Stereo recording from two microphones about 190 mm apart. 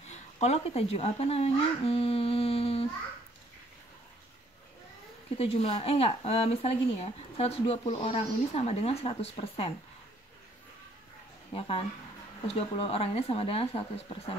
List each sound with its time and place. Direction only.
0.1 s speech: 35° left (ahead or behind)
5.4 s speech: 35° left (ahead or behind)
11.5 s speech: 30° left (ahead or behind)